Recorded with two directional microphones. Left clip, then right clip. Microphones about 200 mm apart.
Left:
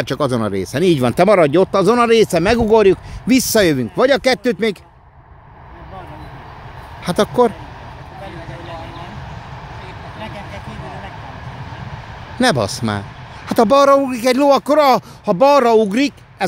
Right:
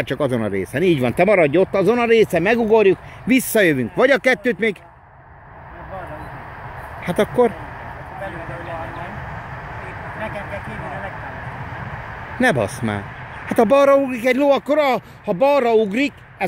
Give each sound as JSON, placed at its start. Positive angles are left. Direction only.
{"t": 0.1, "sound": "speech", "side_deg": 15}
{"t": 7.0, "sound": "speech", "side_deg": 15}
{"t": 12.4, "sound": "speech", "side_deg": 15}